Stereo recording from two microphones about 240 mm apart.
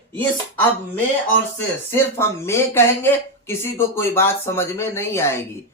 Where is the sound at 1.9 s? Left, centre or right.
Centre.